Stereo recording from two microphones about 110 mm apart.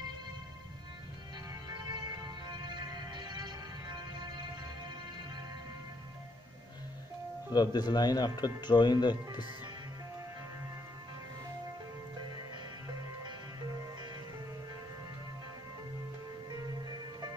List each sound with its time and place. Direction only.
1.5 s music: 40° right (ahead or behind)
7.5 s speech: 40° left (ahead or behind)